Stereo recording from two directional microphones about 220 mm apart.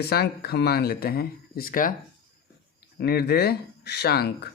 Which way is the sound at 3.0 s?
45° left (ahead or behind).